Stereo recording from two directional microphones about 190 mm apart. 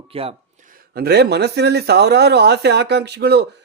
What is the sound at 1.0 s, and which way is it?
Speech, 60° right (ahead or behind).